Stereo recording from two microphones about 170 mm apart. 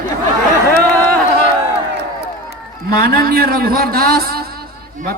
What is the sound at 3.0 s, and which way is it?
A man's voice, 60° right (ahead or behind).